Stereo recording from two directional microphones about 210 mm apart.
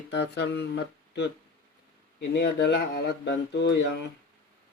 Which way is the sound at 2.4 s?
50° left (ahead or behind).